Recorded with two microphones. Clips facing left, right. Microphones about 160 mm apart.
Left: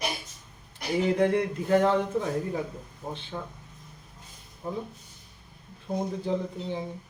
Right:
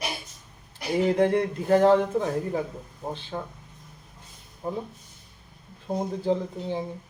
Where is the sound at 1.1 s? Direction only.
35° right (ahead or behind).